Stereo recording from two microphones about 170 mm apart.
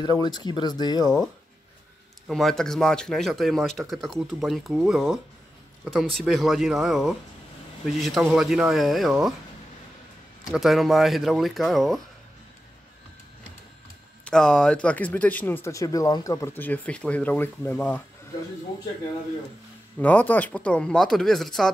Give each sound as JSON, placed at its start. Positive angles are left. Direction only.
{"t": 0.0, "sound": "speech", "side_deg": 25}
{"t": 2.2, "sound": "speech", "side_deg": 0}
{"t": 10.5, "sound": "speech", "side_deg": 0}
{"t": 14.2, "sound": "speech", "side_deg": 5}
{"t": 20.0, "sound": "speech", "side_deg": 10}